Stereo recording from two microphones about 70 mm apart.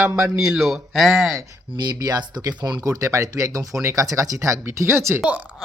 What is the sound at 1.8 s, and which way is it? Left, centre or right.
Speech, right.